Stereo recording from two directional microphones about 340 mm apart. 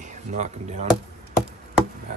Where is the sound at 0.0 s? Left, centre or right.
Right.